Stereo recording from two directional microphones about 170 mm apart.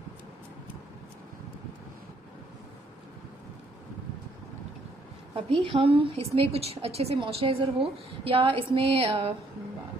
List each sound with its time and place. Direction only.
5.3 s a woman's voice: 30° right (ahead or behind)